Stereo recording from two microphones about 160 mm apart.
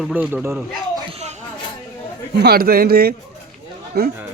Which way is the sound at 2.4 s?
75° right (ahead or behind).